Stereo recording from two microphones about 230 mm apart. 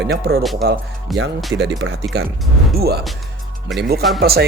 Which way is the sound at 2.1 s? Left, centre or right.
Right.